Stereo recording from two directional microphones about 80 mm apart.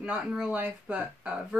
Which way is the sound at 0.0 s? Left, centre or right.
Centre.